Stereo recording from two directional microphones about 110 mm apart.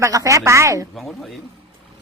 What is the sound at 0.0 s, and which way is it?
Speech, 30° right (ahead or behind).